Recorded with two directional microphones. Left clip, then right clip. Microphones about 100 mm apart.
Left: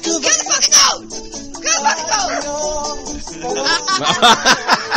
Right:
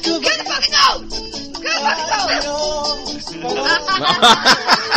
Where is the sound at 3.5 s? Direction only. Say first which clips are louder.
Even; 40° left (ahead or behind).